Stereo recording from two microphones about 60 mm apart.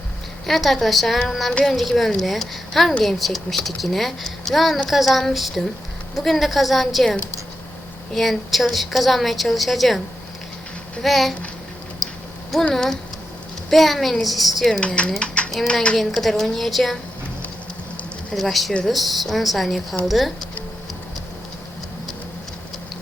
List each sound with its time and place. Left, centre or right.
0.4 s speech: centre
11.0 s speech: centre
12.7 s speech: centre
14.7 s speech: centre
16.0 s speech: centre
18.3 s speech: centre